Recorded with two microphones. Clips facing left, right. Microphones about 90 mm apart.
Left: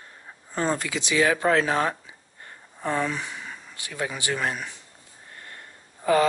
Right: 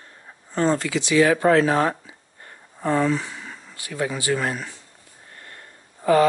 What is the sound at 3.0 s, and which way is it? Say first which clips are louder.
Speech: right 7 dB; 20° right (ahead or behind).